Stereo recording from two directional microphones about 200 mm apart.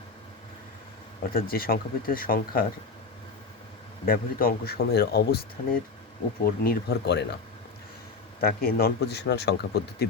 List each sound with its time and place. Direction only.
1.2 s speech: 45° left (ahead or behind)
4.0 s speech: 45° left (ahead or behind)
6.4 s speech: 50° left (ahead or behind)
8.6 s speech: 50° left (ahead or behind)